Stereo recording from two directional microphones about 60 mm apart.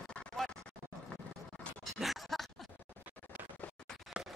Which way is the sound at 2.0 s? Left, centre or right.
Centre.